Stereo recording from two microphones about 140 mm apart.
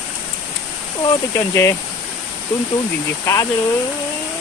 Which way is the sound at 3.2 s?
20° left (ahead or behind).